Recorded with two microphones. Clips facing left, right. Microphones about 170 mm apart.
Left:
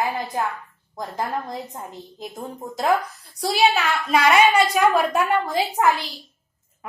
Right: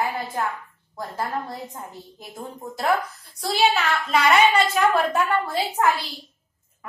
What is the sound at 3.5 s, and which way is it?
A woman's voice, 15° left (ahead or behind).